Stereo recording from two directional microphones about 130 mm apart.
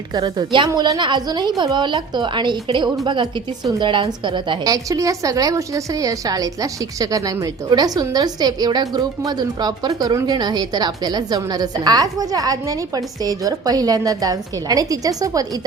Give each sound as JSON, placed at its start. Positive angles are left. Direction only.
{"t": 0.1, "sound": "a woman's voice", "side_deg": -35}